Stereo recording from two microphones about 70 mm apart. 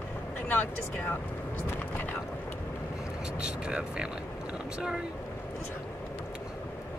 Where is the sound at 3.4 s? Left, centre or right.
Centre.